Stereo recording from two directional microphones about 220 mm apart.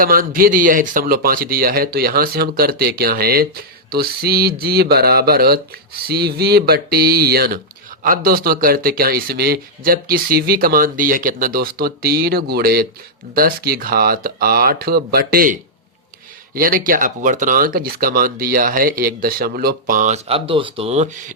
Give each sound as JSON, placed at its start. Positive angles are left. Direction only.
{"t": 0.0, "sound": "speech", "side_deg": -40}
{"t": 16.6, "sound": "speech", "side_deg": -40}